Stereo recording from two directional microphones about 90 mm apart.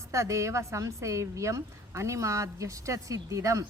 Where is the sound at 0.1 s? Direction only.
35° right (ahead or behind).